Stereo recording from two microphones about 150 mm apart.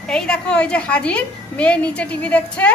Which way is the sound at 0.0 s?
5° left (ahead or behind).